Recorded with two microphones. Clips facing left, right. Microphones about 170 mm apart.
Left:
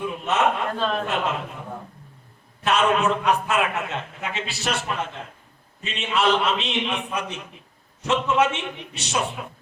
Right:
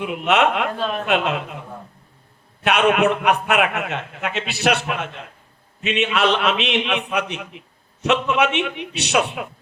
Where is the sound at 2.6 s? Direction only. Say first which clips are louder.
Right 3 dB; 70° right (ahead or behind).